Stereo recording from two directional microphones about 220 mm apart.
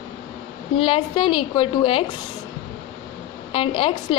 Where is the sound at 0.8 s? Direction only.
25° left (ahead or behind).